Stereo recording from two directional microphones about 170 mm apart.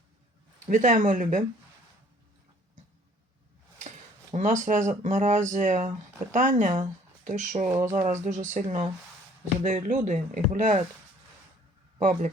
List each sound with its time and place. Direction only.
0.7 s speech: 50° right (ahead or behind)
4.4 s speech: 45° right (ahead or behind)
11.9 s speech: 50° right (ahead or behind)